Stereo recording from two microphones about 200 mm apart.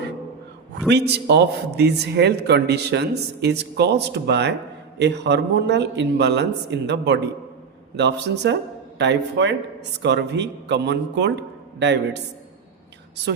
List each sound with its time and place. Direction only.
0.9 s speech: 55° right (ahead or behind)